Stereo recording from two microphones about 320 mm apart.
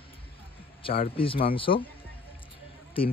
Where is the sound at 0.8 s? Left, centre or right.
Centre.